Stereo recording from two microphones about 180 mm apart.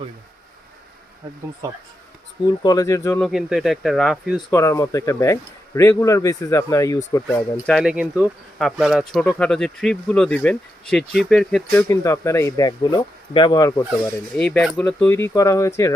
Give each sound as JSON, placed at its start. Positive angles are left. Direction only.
{"t": 2.6, "sound": "speech", "side_deg": 20}
{"t": 3.2, "sound": "speech", "side_deg": 0}
{"t": 4.5, "sound": "speech", "side_deg": 15}
{"t": 7.7, "sound": "speech", "side_deg": -5}
{"t": 11.9, "sound": "speech", "side_deg": 15}
{"t": 14.3, "sound": "speech", "side_deg": 5}